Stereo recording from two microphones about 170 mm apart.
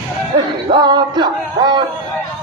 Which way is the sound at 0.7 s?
25° right (ahead or behind).